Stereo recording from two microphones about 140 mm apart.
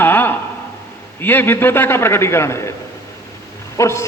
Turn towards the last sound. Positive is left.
turn(degrees=20)  # may be behind; listen again after turning